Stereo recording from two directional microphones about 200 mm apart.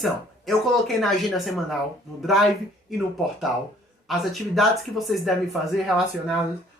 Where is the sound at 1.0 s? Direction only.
Centre (ahead or behind).